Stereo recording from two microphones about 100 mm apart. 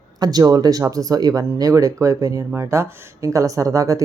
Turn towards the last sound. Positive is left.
turn(degrees=-35)  # may be behind; listen again after turning